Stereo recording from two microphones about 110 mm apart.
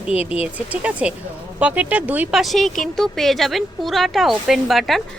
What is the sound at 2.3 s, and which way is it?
Speech, centre (ahead or behind).